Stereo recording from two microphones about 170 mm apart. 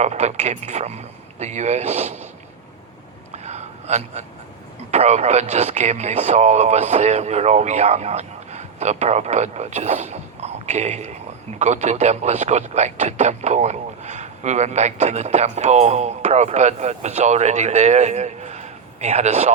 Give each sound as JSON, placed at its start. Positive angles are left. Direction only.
{"t": 0.0, "sound": "speech", "side_deg": -40}
{"t": 3.3, "sound": "a sound", "side_deg": -40}
{"t": 4.9, "sound": "speech", "side_deg": -40}